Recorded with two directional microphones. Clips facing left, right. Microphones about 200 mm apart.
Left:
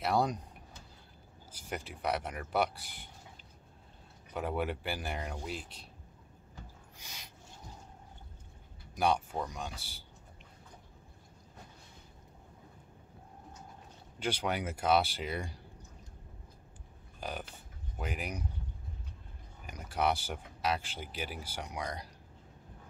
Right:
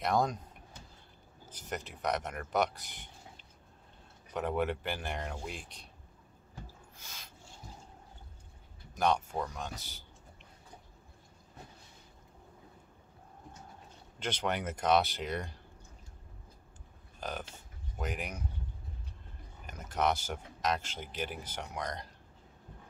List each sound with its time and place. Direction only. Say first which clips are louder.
0.0 s speech: even; 10° left (ahead or behind)
1.5 s speech: right 1 dB; 10° left (ahead or behind)
4.3 s speech: right 2 dB; 5° left (ahead or behind)
7.0 s a sound: left 1 dB; 15° left (ahead or behind)
8.9 s speech: even; 10° left (ahead or behind)
14.2 s speech: even; 10° left (ahead or behind)
17.2 s speech: right 1 dB; 10° left (ahead or behind)
19.6 s speech: even; 10° left (ahead or behind)